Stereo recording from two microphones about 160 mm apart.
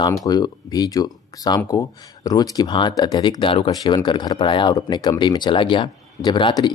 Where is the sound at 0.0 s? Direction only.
25° left (ahead or behind).